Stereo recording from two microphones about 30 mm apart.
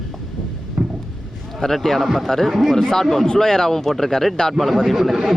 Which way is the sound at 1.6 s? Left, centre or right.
Centre.